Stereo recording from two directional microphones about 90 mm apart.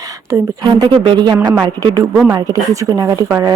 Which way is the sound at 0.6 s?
60° right (ahead or behind).